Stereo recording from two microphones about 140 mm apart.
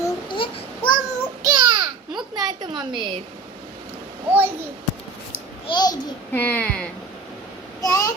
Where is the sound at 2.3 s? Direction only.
30° right (ahead or behind).